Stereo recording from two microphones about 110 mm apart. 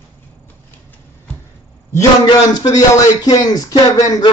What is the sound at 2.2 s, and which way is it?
Speech, 40° left (ahead or behind).